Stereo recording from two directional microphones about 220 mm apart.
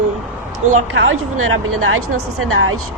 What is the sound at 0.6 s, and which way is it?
Speech, 30° right (ahead or behind).